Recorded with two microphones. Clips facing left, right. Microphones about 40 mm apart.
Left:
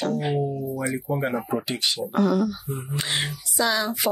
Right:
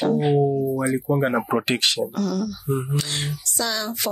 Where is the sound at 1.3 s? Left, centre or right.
Right.